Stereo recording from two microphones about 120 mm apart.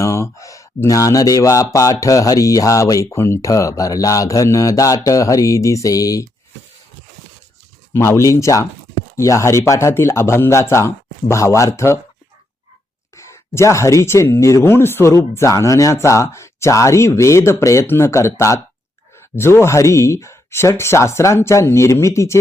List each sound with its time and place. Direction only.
0.0 s speech: 25° left (ahead or behind)
7.9 s speech: 25° left (ahead or behind)
13.1 s speech: 25° left (ahead or behind)